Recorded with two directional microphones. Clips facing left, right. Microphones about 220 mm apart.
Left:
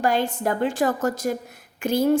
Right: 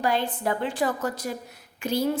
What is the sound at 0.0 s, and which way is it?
A woman's voice, 45° left (ahead or behind).